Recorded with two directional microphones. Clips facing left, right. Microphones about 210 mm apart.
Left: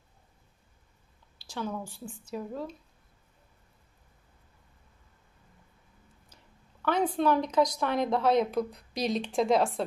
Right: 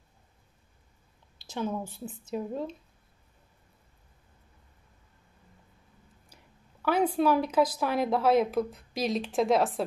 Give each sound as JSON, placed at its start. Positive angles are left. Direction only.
{"t": 1.4, "sound": "a woman's voice", "side_deg": -20}
{"t": 6.2, "sound": "speech", "side_deg": -10}